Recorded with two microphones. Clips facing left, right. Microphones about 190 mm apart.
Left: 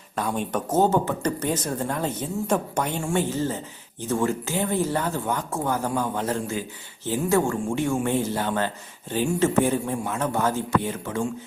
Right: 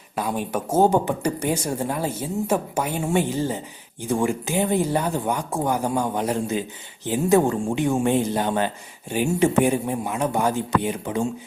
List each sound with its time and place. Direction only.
0.2 s speech: 10° right (ahead or behind)